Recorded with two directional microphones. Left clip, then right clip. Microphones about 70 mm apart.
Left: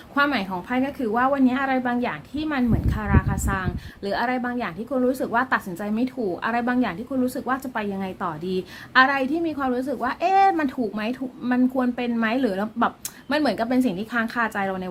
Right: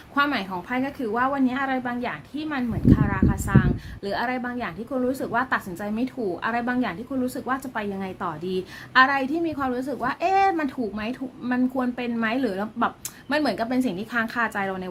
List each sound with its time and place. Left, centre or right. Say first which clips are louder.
0.1 s a woman's voice: left 1 dB; left
10.8 s speech: left 3 dB; left
11.4 s speech: left 3 dB; left